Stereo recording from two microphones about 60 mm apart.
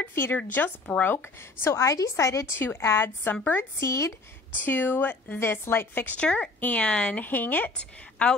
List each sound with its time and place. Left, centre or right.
0.1 s speech: left
1.7 s a woman's voice: left
2.6 s a woman's voice: left
3.8 s a woman's voice: left
4.6 s speech: left
6.1 s a woman's voice: centre
7.2 s speech: left
7.7 s a woman's voice: centre